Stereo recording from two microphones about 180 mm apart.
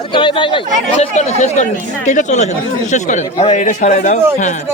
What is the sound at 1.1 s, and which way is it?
A man's voice, 40° left (ahead or behind).